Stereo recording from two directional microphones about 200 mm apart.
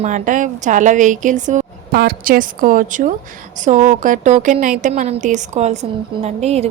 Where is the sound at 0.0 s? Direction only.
40° right (ahead or behind).